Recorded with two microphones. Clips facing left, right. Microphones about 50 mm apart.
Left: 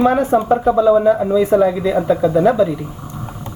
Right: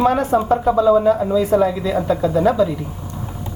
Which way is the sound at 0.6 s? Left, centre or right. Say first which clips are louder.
Left 1 dB; centre.